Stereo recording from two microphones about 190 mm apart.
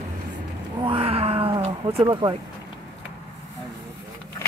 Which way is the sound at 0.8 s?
30° right (ahead or behind).